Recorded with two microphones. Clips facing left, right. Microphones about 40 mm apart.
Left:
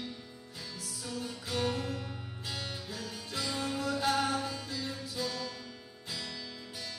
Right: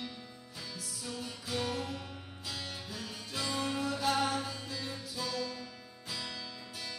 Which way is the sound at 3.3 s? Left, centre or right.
Right.